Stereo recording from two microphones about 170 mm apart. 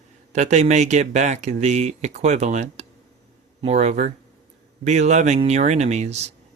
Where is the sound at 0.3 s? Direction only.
45° right (ahead or behind).